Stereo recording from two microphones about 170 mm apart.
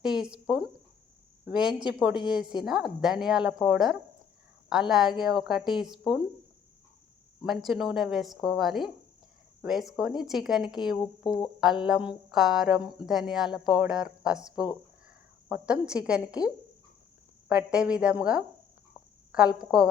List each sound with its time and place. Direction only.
0.0 s speech: 5° right (ahead or behind)
7.4 s speech: centre (ahead or behind)
11.3 s speech: 25° left (ahead or behind)
12.3 s a woman's voice: centre (ahead or behind)
17.5 s speech: 5° right (ahead or behind)